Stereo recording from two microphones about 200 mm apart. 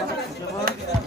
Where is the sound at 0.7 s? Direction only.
45° right (ahead or behind).